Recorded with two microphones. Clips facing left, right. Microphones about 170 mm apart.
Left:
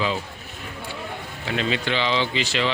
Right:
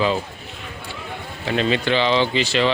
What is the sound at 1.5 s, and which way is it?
Speech, 35° right (ahead or behind).